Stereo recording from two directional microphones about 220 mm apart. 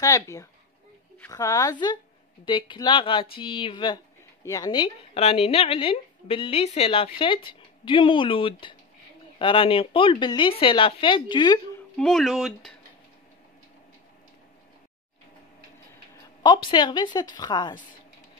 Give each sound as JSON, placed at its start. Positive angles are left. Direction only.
{"t": 0.0, "sound": "speech", "side_deg": 15}
{"t": 12.0, "sound": "speech", "side_deg": 0}
{"t": 16.7, "sound": "speech", "side_deg": 20}